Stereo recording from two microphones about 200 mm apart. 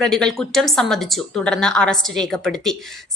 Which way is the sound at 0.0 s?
5° left (ahead or behind).